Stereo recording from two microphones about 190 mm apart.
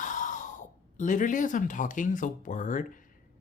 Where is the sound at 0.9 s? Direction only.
40° left (ahead or behind).